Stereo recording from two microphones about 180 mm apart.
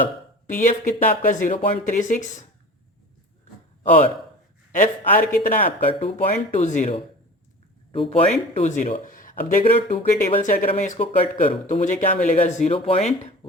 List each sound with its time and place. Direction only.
0.0 s a man's voice: 45° left (ahead or behind)
4.7 s a man's voice: 45° left (ahead or behind)
7.9 s a man's voice: 30° left (ahead or behind)